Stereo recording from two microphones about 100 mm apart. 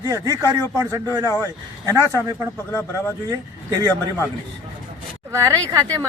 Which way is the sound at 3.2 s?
40° right (ahead or behind).